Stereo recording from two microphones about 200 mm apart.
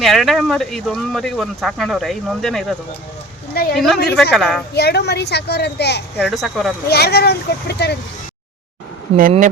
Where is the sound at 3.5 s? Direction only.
50° left (ahead or behind).